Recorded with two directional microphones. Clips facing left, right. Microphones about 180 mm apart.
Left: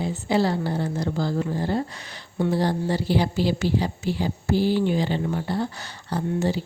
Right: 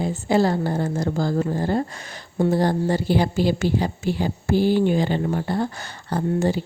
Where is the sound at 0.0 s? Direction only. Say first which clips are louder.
Right 3 dB; 45° right (ahead or behind).